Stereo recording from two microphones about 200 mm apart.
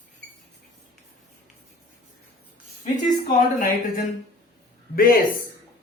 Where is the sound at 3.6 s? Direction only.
45° left (ahead or behind).